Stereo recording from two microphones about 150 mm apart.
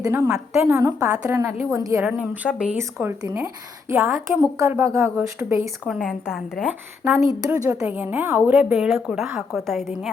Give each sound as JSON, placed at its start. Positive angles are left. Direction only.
{"t": 0.0, "sound": "a woman's voice", "side_deg": -15}
{"t": 1.0, "sound": "a woman's voice", "side_deg": -10}
{"t": 2.0, "sound": "speech", "side_deg": -10}
{"t": 5.8, "sound": "speech", "side_deg": 5}
{"t": 7.6, "sound": "a woman's voice", "side_deg": -20}
{"t": 7.9, "sound": "speech", "side_deg": -10}